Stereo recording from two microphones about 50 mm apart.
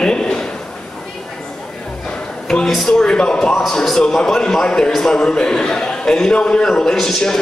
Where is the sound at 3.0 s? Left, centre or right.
Centre.